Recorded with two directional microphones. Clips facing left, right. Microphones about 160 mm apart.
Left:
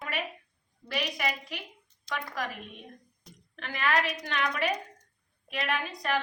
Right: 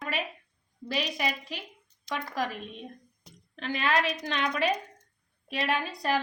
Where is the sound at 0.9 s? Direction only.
30° right (ahead or behind).